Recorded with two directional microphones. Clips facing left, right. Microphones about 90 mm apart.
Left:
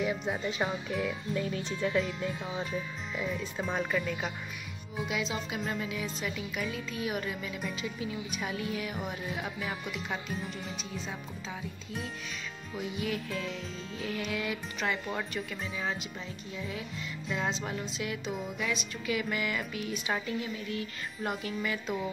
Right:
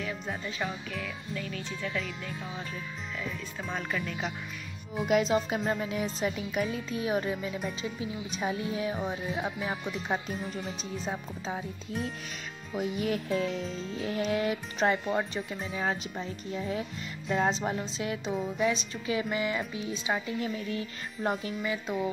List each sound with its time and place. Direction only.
0.0 s speech: 15° left (ahead or behind)
5.0 s speech: 45° right (ahead or behind)
19.2 s music: 25° right (ahead or behind)